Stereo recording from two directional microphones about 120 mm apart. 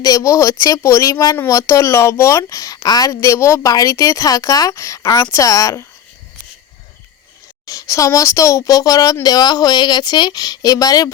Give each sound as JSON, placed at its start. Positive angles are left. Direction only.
{"t": 0.0, "sound": "a woman's voice", "side_deg": 25}
{"t": 7.7, "sound": "a woman's voice", "side_deg": 25}